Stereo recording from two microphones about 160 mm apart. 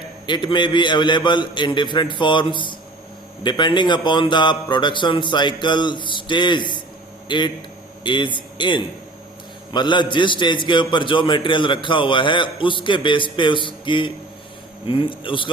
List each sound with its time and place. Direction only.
0.3 s a man's voice: 30° left (ahead or behind)